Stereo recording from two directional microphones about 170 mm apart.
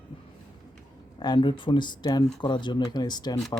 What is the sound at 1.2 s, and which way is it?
Speech, 25° left (ahead or behind).